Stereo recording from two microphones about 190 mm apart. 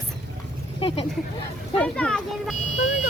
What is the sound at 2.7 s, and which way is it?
Car alarm, 40° left (ahead or behind).